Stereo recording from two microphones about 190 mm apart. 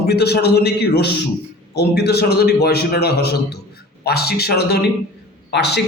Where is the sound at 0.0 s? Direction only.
60° left (ahead or behind).